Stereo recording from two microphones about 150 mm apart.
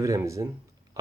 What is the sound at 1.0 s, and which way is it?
Pig, 20° right (ahead or behind).